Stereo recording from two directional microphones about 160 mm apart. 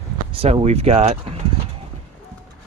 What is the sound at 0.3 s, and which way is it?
Speech, 40° right (ahead or behind).